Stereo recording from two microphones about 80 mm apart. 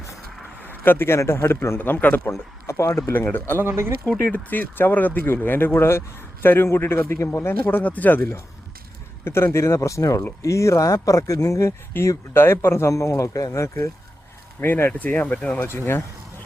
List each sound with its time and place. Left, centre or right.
0.6 s a man's voice: left
2.3 s speech: left
3.1 s a man's voice: left
3.6 s speech: right
4.3 s a man's voice: left
10.4 s speech: left
11.9 s speech: left
14.6 s a man's voice: left
15.8 s a man's voice: left